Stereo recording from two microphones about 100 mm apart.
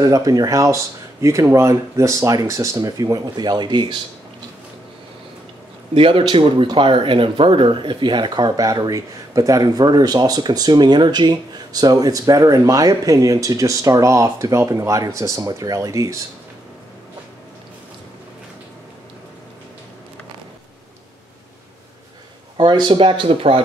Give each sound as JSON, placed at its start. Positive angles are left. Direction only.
{"t": 0.0, "sound": "speech", "side_deg": -35}
{"t": 5.9, "sound": "speech", "side_deg": -65}
{"t": 22.6, "sound": "speech", "side_deg": -50}